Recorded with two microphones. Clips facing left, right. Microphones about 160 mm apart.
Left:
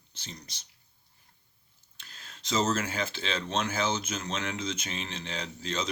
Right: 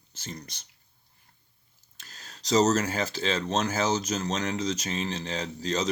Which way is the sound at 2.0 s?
40° right (ahead or behind).